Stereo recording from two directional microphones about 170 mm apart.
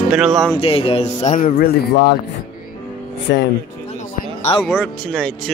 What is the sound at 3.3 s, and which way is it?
Speech, 75° left (ahead or behind).